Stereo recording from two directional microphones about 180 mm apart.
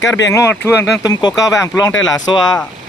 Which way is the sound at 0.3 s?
15° left (ahead or behind).